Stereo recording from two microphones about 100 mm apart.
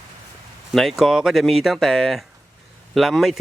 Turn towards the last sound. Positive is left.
turn(degrees=0)  # may be behind; listen again after turning